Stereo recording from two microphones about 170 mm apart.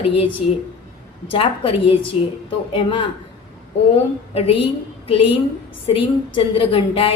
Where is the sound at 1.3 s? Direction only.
30° left (ahead or behind).